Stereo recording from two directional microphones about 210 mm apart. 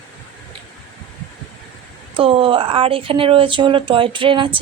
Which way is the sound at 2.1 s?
25° right (ahead or behind).